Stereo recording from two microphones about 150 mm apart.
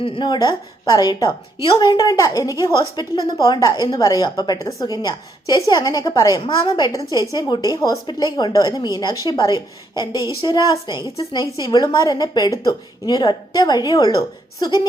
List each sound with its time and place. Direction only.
0.0 s a woman's voice: 35° left (ahead or behind)